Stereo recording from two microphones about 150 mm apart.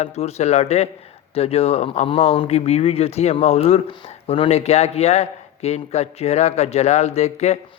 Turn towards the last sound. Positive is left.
turn(degrees=45)  # may be behind; listen again after turning